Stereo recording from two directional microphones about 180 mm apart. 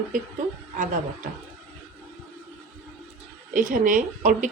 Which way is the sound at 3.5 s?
45° right (ahead or behind).